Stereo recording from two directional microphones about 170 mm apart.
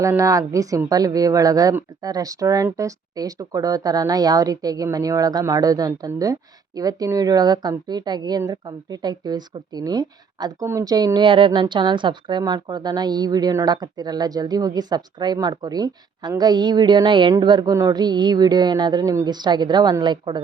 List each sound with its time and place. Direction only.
0.0 s a woman's voice: 20° right (ahead or behind)